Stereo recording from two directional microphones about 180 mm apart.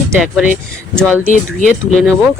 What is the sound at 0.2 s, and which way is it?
Speech, 5° right (ahead or behind).